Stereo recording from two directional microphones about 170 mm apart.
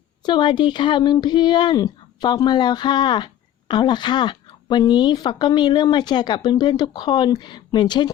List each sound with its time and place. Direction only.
0.3 s a woman's voice: 25° left (ahead or behind)